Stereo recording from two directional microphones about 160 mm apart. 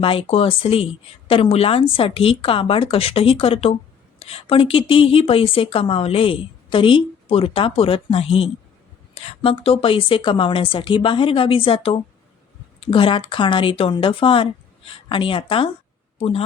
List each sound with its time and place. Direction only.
0.0 s speech: 35° left (ahead or behind)